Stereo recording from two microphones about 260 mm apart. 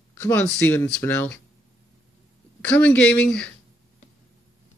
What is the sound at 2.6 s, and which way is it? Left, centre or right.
Speech, centre.